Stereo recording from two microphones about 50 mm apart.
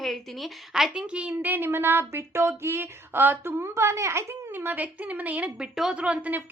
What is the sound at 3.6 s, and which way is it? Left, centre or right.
Speech, right.